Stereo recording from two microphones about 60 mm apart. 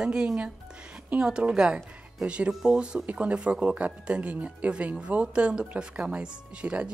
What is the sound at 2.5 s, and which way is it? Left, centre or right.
Speech, centre.